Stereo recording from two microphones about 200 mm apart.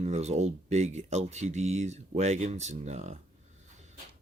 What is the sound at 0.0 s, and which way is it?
Speech, 35° right (ahead or behind).